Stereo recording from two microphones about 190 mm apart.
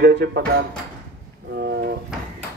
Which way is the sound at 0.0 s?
60° right (ahead or behind).